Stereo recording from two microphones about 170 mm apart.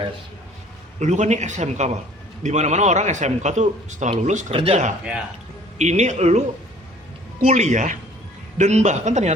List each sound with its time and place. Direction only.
0.9 s a man's voice: 45° right (ahead or behind)
7.4 s a man's voice: 45° right (ahead or behind)